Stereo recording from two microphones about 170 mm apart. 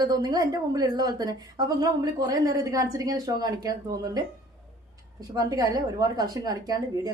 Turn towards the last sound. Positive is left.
turn(degrees=-20)  # may be behind; listen again after turning